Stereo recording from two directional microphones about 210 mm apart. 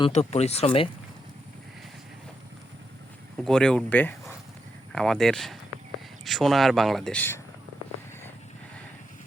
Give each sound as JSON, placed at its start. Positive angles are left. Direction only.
{"t": 0.0, "sound": "speech", "side_deg": 30}
{"t": 3.3, "sound": "speech", "side_deg": 5}